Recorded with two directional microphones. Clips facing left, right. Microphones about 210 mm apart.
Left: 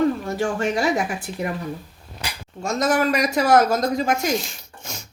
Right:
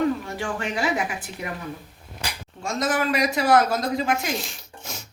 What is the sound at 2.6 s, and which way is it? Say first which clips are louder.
Speech: left 4 dB; 40° left (ahead or behind).